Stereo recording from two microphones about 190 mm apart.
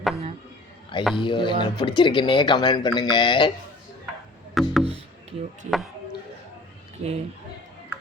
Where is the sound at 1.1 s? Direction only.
25° left (ahead or behind).